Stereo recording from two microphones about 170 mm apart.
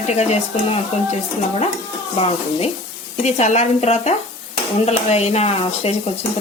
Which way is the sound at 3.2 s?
40° left (ahead or behind).